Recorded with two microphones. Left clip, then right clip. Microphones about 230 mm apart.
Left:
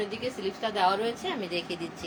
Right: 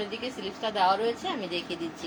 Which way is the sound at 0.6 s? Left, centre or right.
Left.